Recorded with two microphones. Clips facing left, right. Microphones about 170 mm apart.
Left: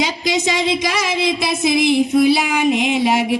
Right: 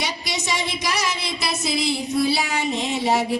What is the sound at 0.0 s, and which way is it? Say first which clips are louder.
Speech: left 9 dB; 90° left.